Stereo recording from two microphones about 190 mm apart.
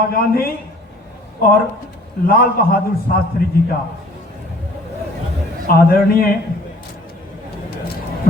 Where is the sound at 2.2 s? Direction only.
50° left (ahead or behind).